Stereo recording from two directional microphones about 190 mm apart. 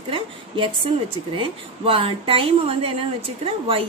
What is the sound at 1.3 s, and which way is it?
A woman's voice, 30° right (ahead or behind).